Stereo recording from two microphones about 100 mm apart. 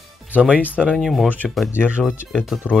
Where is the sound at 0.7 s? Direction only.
10° right (ahead or behind).